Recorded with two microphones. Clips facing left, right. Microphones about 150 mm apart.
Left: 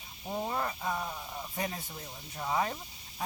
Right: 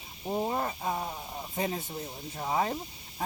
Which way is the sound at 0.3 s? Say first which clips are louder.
Right 3 dB; 20° right (ahead or behind).